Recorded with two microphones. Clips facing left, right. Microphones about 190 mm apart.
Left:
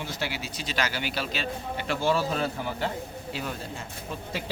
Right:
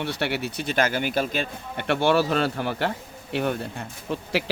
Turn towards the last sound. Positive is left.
turn(degrees=-65)  # may be behind; listen again after turning